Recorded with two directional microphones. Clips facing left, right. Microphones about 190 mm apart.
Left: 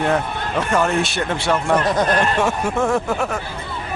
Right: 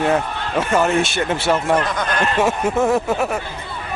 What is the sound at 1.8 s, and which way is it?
Speech, 35° left (ahead or behind).